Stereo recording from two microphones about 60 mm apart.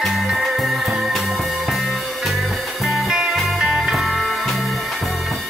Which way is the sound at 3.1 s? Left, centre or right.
Centre.